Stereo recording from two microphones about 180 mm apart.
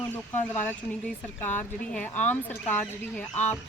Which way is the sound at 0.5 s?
10° left (ahead or behind).